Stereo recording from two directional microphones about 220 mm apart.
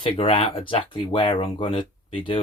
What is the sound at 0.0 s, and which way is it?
Speech, 25° left (ahead or behind).